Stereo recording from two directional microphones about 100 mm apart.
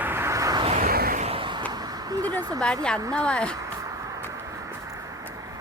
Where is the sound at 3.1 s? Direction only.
10° left (ahead or behind).